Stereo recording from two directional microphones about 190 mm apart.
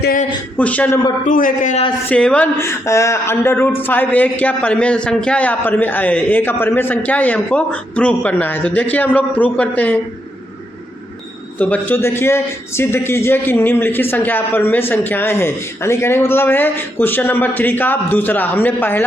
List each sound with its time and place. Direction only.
0.0 s a man's voice: 45° left (ahead or behind)
0.5 s a man's voice: 10° left (ahead or behind)
1.2 s a man's voice: 45° left (ahead or behind)
2.0 s a man's voice: 5° left (ahead or behind)
11.6 s a man's voice: 10° left (ahead or behind)